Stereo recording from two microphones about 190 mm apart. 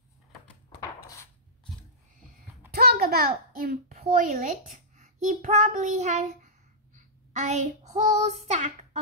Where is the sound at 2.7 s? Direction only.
55° right (ahead or behind).